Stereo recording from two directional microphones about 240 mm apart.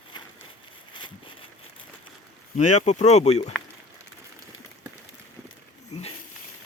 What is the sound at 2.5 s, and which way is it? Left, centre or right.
Speech, left.